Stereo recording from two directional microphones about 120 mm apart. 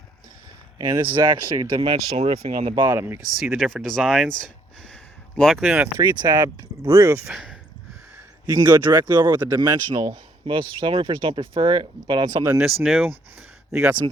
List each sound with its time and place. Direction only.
1.1 s speech: 40° right (ahead or behind)
2.9 s speech: 20° right (ahead or behind)
3.5 s speech: centre (ahead or behind)
5.4 s speech: centre (ahead or behind)
6.0 s speech: 35° right (ahead or behind)
7.3 s speech: 5° right (ahead or behind)
8.5 s speech: 20° right (ahead or behind)
9.6 s speech: 30° right (ahead or behind)
10.4 s speech: 45° right (ahead or behind); by 12.5 s 30° right (ahead or behind)
12.6 s speech: centre (ahead or behind)